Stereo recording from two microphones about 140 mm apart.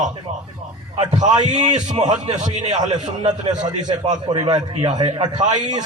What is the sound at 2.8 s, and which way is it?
A man's voice, 30° right (ahead or behind).